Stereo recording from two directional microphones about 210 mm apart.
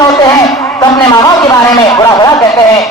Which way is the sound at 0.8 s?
20° left (ahead or behind).